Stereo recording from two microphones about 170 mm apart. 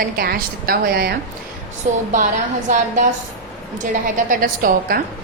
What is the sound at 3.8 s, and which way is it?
A woman's voice, 50° right (ahead or behind).